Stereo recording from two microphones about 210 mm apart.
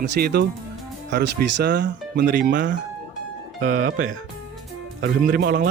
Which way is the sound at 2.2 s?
40° right (ahead or behind).